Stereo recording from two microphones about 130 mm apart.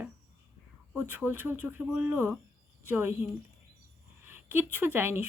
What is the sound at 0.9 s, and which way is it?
Speech, 15° right (ahead or behind).